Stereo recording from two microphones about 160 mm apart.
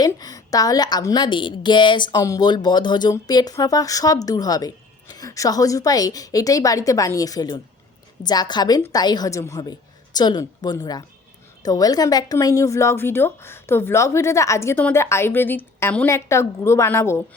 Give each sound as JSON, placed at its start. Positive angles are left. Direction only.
{"t": 0.0, "sound": "a woman's voice", "side_deg": 25}